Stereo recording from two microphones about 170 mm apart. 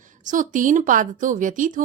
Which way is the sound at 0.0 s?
50° right (ahead or behind).